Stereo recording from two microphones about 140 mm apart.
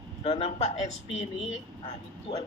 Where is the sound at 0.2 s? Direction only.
45° left (ahead or behind).